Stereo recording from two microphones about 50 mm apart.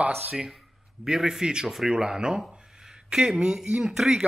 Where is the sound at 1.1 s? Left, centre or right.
Centre.